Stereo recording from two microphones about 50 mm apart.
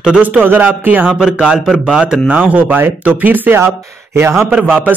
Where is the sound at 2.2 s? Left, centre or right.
Right.